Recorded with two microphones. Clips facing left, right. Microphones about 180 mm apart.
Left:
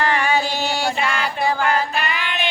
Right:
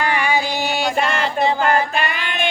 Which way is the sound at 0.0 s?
15° right (ahead or behind).